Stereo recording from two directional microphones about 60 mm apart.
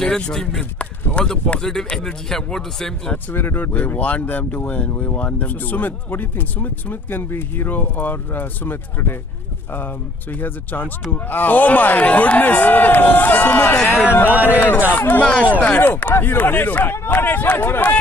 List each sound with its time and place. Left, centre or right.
0.0 s speech: centre
2.3 s speech: centre
3.3 s speech: left
10.4 s speech: left
15.2 s speech: left
15.8 s speech: left